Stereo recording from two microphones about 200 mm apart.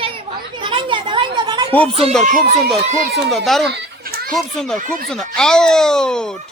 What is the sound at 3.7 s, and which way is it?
Children playing, 50° right (ahead or behind).